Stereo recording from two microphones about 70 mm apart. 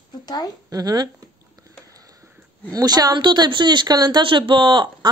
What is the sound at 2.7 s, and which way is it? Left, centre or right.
Speech, right.